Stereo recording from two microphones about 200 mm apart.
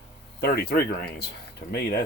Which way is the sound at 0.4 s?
55° left (ahead or behind).